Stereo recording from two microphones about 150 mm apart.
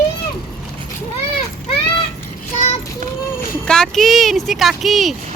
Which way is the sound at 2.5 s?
50° left (ahead or behind).